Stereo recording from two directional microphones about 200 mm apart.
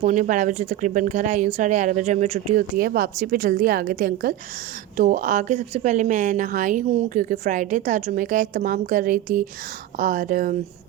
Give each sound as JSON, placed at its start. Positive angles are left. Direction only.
{"t": 0.0, "sound": "speech", "side_deg": -40}